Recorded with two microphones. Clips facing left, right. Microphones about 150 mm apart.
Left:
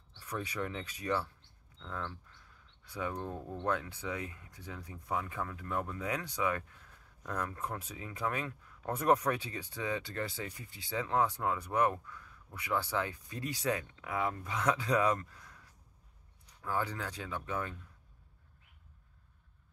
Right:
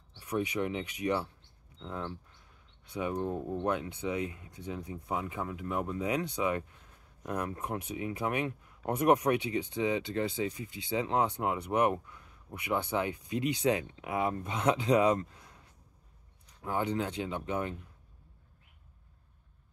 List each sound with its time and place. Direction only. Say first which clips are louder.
0.1 s speech: right 7 dB; 15° right (ahead or behind)